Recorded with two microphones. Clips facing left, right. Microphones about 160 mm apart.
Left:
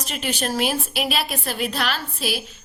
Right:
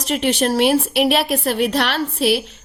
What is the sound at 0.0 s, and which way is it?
A woman's voice, 70° right (ahead or behind).